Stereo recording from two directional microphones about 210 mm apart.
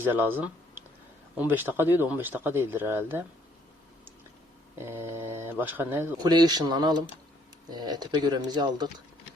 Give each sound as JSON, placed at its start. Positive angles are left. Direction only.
{"t": 0.0, "sound": "speech", "side_deg": -10}
{"t": 4.8, "sound": "speech", "side_deg": -10}